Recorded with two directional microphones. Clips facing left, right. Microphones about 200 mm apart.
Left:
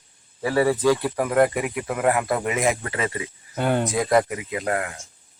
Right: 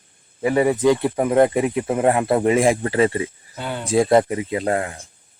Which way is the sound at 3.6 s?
55° left (ahead or behind).